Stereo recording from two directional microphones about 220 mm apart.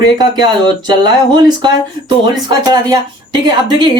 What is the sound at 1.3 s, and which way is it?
Speech, 20° right (ahead or behind).